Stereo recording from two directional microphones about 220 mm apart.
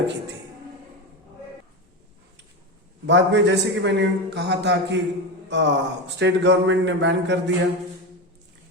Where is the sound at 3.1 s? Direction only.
55° right (ahead or behind).